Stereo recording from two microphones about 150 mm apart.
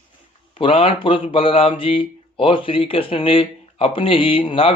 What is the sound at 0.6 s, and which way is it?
Speech, 40° left (ahead or behind).